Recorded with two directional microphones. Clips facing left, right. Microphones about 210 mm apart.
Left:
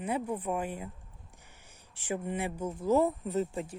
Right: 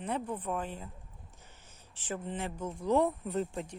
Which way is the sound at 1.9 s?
15° left (ahead or behind).